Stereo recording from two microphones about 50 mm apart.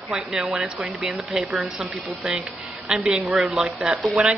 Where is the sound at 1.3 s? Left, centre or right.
Centre.